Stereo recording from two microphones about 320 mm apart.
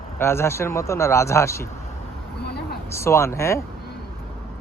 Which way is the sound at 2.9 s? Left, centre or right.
Centre.